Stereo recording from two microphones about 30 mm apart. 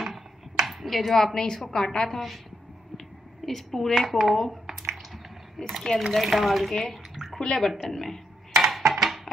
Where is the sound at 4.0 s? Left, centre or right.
Centre.